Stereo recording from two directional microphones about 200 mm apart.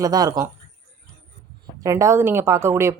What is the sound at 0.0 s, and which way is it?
Speech, 20° right (ahead or behind).